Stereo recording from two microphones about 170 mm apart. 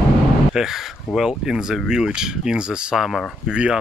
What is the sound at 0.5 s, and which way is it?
Speech, centre (ahead or behind).